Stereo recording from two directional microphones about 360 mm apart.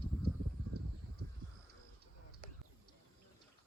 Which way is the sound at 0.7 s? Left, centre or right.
Right.